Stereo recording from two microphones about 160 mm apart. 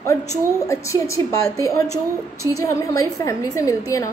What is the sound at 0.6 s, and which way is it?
A woman's voice, 20° left (ahead or behind).